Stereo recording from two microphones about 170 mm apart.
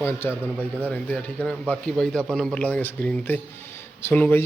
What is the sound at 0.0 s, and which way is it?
Speech, 15° left (ahead or behind).